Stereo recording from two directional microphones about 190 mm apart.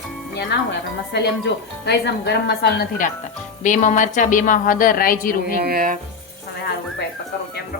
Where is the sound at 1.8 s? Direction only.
60° left (ahead or behind).